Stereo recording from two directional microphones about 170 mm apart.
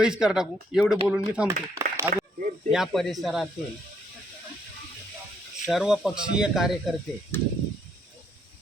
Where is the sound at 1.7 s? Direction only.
20° right (ahead or behind).